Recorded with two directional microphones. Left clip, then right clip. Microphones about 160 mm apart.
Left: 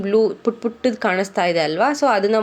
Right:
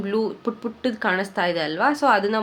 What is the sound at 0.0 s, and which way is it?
A woman's voice, 25° left (ahead or behind).